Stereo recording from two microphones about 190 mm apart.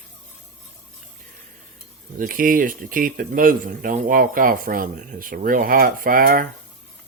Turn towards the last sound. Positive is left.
turn(degrees=-50)  # may be behind; listen again after turning